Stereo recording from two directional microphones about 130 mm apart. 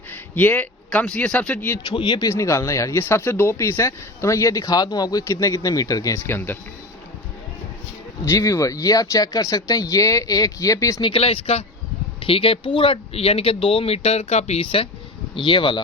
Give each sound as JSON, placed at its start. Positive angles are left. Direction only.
{"t": 0.1, "sound": "a sound", "side_deg": 15}
{"t": 0.9, "sound": "speech", "side_deg": 5}
{"t": 1.9, "sound": "speech", "side_deg": 40}
{"t": 2.2, "sound": "speech", "side_deg": 25}
{"t": 8.2, "sound": "speech", "side_deg": 25}
{"t": 11.0, "sound": "speech", "side_deg": 45}